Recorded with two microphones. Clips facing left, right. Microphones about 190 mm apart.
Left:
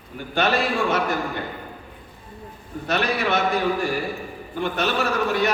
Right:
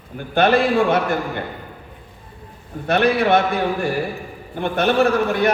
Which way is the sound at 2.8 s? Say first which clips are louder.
Right 7 dB; 55° right (ahead or behind).